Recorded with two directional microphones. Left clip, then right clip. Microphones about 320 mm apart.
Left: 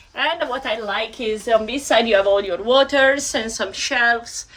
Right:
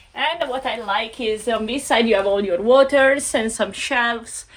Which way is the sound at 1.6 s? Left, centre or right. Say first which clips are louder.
Left 1 dB; right.